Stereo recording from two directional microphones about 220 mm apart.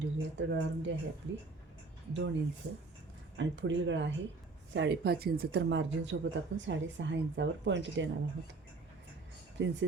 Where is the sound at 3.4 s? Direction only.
55° right (ahead or behind).